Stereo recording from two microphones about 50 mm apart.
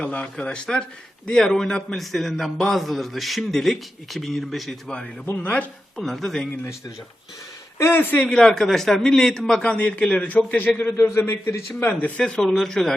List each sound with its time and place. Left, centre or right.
0.0 s a man's voice: left; by 4.8 s centre
5.2 s speech: left
6.0 s a man's voice: centre
7.8 s speech: left
8.3 s speech: centre
9.7 s a man's voice: left
10.9 s a man's voice: left
11.8 s speech: left
12.2 s speech: centre